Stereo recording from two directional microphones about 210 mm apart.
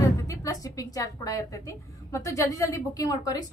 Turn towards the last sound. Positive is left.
turn(degrees=15)  # may be behind; listen again after turning